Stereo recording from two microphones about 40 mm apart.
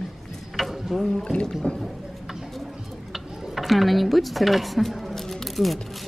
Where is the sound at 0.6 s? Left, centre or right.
Centre.